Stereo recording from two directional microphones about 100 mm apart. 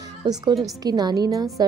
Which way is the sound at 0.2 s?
50° right (ahead or behind).